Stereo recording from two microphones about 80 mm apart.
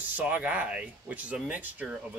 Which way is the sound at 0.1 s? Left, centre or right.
Centre.